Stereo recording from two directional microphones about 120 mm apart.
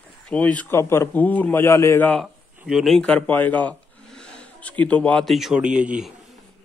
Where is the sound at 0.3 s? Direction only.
10° left (ahead or behind).